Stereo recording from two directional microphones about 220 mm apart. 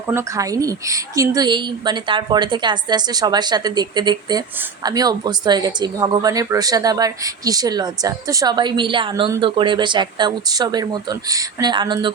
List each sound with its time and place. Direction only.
0.1 s speech: 15° right (ahead or behind)